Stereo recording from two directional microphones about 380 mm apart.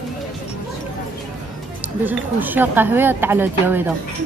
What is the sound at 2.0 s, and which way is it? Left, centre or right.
Speech, centre.